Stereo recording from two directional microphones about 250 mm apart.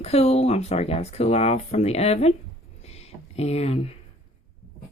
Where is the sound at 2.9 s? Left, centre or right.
Left.